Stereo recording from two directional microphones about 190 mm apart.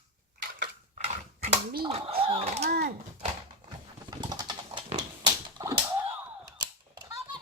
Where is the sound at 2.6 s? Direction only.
55° right (ahead or behind).